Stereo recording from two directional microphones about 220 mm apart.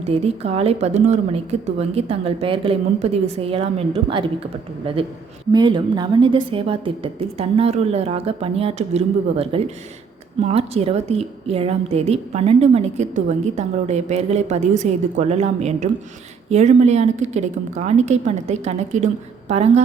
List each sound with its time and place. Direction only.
0.0 s a woman's voice: 25° right (ahead or behind)
5.5 s a woman's voice: 20° right (ahead or behind)